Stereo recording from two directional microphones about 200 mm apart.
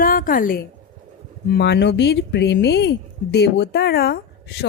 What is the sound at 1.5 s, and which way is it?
Speech, 55° left (ahead or behind).